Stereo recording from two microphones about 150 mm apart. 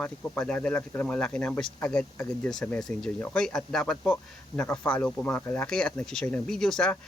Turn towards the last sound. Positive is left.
turn(degrees=5)  # may be behind; listen again after turning